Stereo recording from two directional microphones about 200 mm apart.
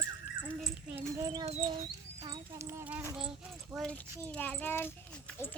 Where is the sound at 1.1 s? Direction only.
20° right (ahead or behind).